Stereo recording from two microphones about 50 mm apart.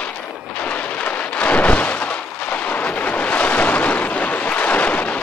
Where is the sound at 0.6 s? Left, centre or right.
Left.